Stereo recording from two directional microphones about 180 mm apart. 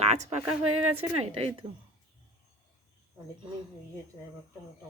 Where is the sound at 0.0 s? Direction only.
40° right (ahead or behind).